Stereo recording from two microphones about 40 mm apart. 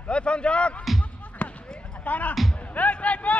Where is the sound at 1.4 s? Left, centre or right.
Left.